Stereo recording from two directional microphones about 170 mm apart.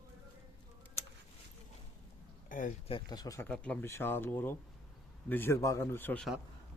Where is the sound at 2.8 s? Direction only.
25° left (ahead or behind).